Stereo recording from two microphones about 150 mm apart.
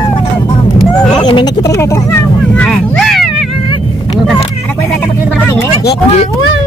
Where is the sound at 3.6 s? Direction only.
30° left (ahead or behind).